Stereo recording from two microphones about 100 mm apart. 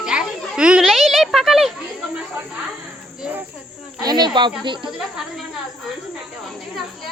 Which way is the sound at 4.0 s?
45° right (ahead or behind).